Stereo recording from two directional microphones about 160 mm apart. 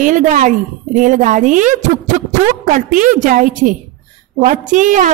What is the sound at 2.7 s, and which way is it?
A woman's voice, 55° right (ahead or behind).